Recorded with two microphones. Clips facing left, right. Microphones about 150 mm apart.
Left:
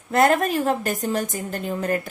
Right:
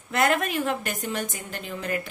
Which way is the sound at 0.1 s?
45° left (ahead or behind).